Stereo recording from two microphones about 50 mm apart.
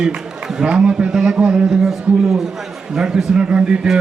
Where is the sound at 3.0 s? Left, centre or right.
Centre.